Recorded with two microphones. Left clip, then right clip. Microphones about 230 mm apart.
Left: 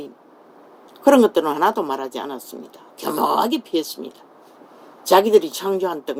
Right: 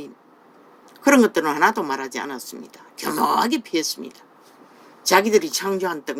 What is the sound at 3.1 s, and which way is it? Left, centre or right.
Speech, right.